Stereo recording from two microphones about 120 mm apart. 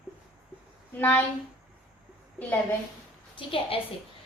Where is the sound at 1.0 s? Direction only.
15° left (ahead or behind).